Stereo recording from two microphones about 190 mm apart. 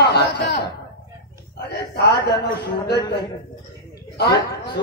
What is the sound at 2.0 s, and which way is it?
A man's voice, 55° left (ahead or behind).